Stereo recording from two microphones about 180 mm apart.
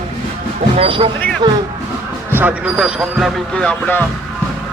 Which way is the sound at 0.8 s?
30° right (ahead or behind).